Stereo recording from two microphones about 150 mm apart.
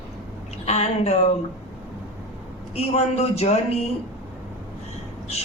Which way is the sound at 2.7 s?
45° left (ahead or behind).